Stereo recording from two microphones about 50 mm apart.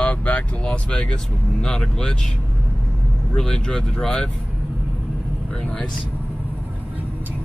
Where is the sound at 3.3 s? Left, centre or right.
Centre.